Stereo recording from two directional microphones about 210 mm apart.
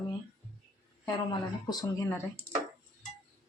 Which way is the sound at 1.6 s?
15° left (ahead or behind).